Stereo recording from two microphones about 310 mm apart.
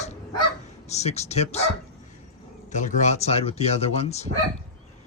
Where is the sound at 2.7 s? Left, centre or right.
Left.